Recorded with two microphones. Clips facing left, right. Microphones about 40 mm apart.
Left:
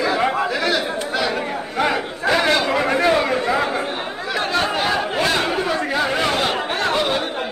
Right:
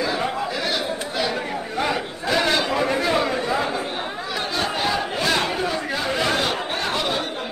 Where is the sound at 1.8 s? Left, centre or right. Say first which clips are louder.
Left 5 dB; left.